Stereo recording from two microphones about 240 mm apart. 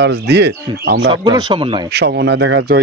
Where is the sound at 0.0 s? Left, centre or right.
Right.